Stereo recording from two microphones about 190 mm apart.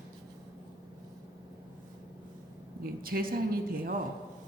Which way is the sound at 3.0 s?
50° right (ahead or behind).